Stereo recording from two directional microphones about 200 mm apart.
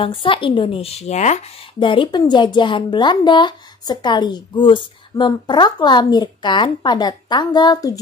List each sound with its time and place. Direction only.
0.0 s speech: 25° left (ahead or behind)
1.9 s speech: 20° left (ahead or behind)